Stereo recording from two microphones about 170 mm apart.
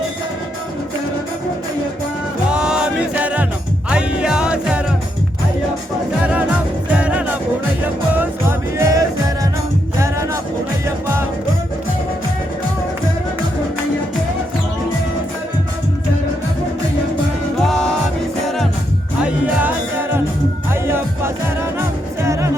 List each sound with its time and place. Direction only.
2.5 s music: 5° right (ahead or behind)
6.9 s music: 5° right (ahead or behind)
17.7 s music: 5° left (ahead or behind)
19.2 s music: 10° right (ahead or behind)